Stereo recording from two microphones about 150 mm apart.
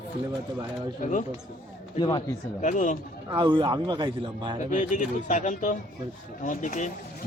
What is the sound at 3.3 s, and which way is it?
A man's voice, 30° right (ahead or behind).